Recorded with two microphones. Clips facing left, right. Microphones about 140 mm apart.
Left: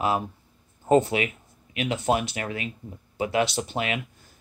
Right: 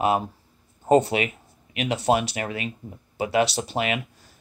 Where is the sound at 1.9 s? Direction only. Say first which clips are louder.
Right 3 dB; 70° right (ahead or behind).